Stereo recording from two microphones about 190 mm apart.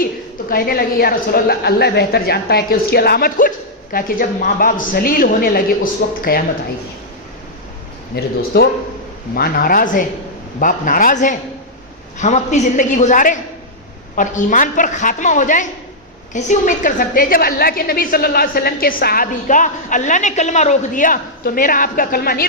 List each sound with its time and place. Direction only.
0.5 s a woman's voice: 50° left (ahead or behind)
8.1 s a woman's voice: 55° left (ahead or behind)